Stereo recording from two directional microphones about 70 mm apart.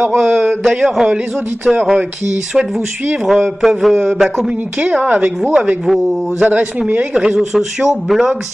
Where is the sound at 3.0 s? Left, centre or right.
Right.